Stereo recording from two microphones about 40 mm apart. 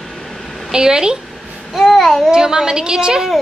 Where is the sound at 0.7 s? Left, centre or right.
Centre.